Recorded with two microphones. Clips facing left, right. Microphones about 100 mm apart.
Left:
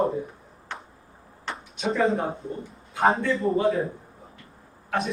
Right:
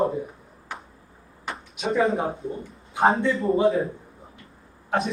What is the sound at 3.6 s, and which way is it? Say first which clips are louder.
Speech: right 4 dB; 30° right (ahead or behind).